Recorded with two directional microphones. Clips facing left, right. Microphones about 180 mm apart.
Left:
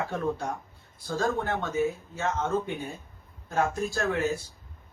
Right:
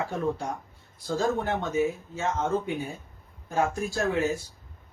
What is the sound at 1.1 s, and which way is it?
Speech, 20° right (ahead or behind).